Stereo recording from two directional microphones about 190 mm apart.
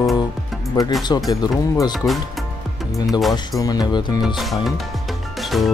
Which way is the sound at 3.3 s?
20° left (ahead or behind).